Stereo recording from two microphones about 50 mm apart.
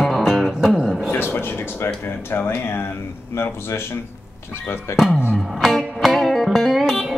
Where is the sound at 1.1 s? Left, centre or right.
Left.